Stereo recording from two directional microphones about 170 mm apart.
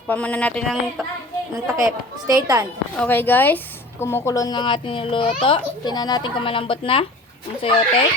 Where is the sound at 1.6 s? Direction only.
20° right (ahead or behind).